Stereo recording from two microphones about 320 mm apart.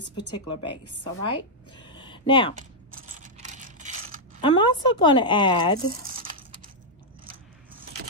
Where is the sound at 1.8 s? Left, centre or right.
Centre.